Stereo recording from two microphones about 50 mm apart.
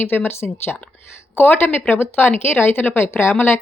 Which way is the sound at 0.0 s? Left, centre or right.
Left.